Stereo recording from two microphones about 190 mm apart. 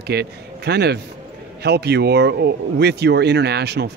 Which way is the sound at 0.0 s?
60° right (ahead or behind).